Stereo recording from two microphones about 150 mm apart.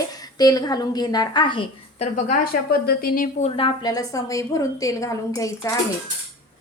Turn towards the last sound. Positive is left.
turn(degrees=20)  # may be behind; listen again after turning